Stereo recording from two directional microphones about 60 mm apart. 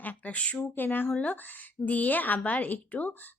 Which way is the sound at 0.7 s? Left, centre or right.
Left.